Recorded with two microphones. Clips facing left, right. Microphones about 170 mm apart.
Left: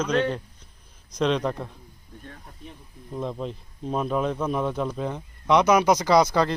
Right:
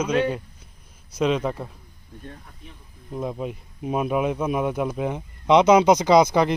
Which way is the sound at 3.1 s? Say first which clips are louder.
Right 2 dB; 5° right (ahead or behind).